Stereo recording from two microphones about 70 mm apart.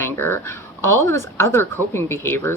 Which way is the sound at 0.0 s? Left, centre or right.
Left.